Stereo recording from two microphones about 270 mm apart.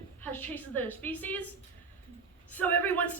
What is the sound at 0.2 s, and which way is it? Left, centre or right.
A woman's voice, centre.